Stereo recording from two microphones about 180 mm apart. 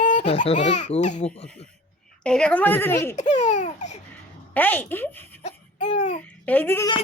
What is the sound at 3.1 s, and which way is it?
Laughter, 40° left (ahead or behind).